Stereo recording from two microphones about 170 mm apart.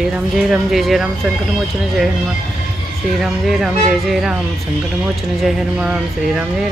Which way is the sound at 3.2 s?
Centre (ahead or behind).